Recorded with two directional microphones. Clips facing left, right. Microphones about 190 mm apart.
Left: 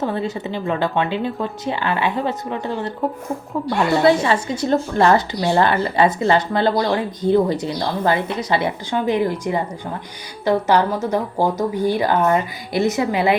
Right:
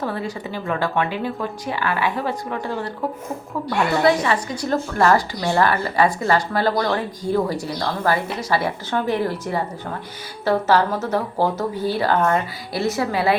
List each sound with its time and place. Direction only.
0.0 s speech: 25° left (ahead or behind)
3.9 s speech: 30° left (ahead or behind)